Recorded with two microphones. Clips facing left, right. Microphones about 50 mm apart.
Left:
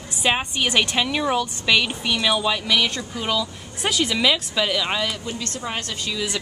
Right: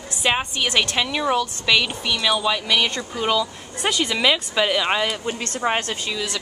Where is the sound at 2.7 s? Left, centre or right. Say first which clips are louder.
Even; centre.